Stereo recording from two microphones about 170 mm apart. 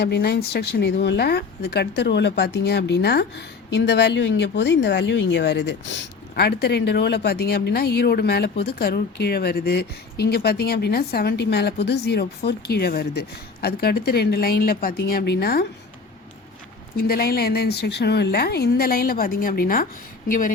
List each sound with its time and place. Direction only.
0.0 s speech: 70° left (ahead or behind)
17.0 s a woman's voice: 60° left (ahead or behind)